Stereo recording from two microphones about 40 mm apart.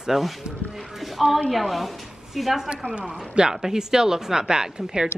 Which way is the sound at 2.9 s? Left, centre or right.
Right.